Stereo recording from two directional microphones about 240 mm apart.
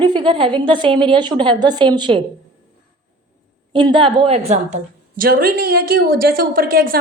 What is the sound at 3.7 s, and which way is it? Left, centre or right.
A woman's voice, centre.